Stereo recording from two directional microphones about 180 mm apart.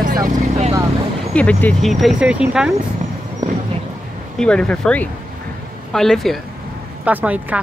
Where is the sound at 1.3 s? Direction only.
5° left (ahead or behind).